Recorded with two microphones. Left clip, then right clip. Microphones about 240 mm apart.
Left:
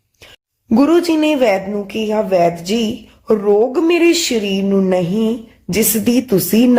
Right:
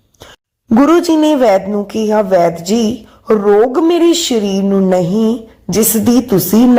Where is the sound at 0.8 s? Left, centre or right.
Centre.